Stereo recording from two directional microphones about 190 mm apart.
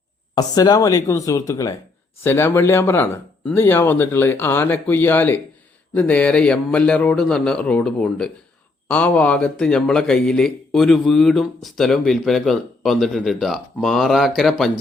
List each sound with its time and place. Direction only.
0.3 s a man's voice: 20° left (ahead or behind); by 14.7 s centre (ahead or behind)